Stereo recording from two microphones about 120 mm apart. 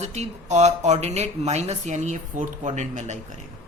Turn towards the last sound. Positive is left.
turn(degrees=-80)